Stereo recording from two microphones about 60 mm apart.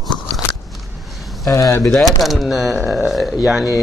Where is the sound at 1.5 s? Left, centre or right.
Left.